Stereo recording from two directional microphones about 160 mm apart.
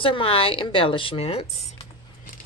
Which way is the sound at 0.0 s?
35° left (ahead or behind).